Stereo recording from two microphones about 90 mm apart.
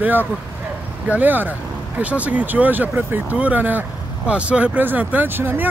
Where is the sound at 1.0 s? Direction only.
20° right (ahead or behind).